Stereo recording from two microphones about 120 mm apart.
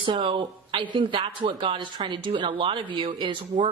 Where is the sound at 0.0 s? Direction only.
45° right (ahead or behind).